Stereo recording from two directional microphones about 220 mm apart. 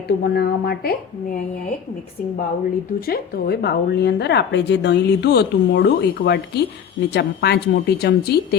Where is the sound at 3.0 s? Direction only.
45° left (ahead or behind).